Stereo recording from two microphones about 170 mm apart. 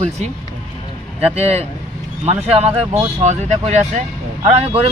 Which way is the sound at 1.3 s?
40° right (ahead or behind).